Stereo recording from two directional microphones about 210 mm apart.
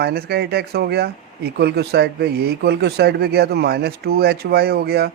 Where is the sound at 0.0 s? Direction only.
50° right (ahead or behind).